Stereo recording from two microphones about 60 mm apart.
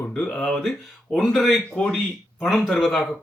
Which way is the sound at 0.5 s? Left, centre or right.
Centre.